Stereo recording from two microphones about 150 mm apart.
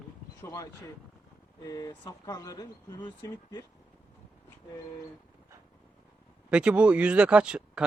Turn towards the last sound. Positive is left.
turn(degrees=-5)  # may be behind; listen again after turning